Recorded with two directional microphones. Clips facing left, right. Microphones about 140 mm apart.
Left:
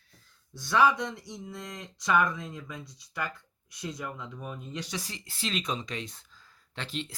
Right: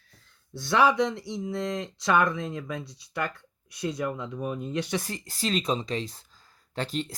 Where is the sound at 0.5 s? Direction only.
65° right (ahead or behind).